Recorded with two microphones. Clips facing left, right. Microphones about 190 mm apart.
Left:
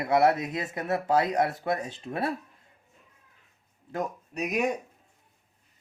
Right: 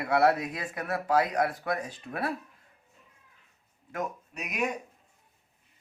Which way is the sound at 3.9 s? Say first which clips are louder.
Left 2 dB; 35° left (ahead or behind).